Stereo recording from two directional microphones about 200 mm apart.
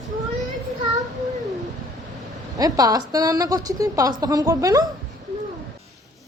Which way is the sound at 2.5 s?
20° right (ahead or behind).